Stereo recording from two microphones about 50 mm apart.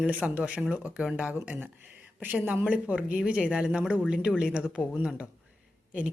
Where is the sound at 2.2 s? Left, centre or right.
Right.